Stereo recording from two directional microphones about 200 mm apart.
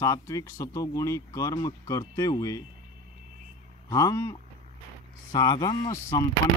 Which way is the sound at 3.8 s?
15° left (ahead or behind).